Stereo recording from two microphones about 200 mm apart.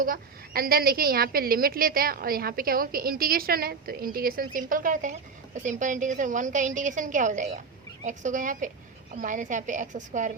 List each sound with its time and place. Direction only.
0.0 s a woman's voice: 45° right (ahead or behind)